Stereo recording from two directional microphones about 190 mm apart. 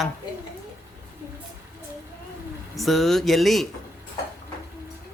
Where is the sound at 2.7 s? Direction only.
Centre (ahead or behind).